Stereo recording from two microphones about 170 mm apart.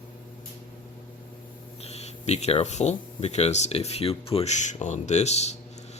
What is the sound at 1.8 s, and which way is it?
Speech, 40° left (ahead or behind).